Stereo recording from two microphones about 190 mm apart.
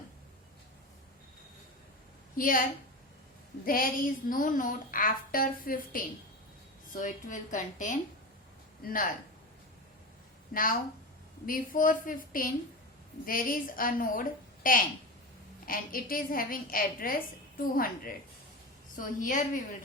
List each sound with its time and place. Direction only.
2.3 s a woman's voice: 45° left (ahead or behind)
3.7 s a woman's voice: 50° left (ahead or behind)
10.5 s a woman's voice: 50° left (ahead or behind)
18.9 s a woman's voice: 45° left (ahead or behind)